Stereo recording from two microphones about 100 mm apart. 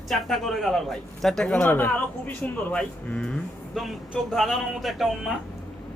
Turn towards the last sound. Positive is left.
turn(degrees=0)  # may be behind; listen again after turning